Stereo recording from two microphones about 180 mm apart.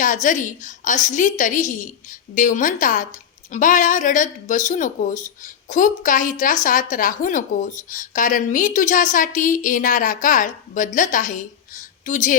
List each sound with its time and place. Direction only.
0.0 s speech: 45° left (ahead or behind)